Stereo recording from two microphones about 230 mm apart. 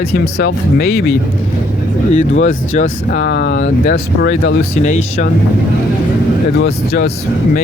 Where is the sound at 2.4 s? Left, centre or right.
Left.